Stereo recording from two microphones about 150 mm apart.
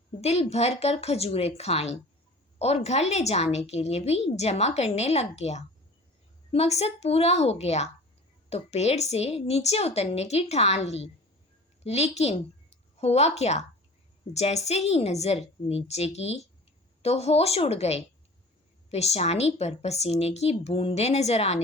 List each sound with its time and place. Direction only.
0.2 s a woman's voice: 45° left (ahead or behind)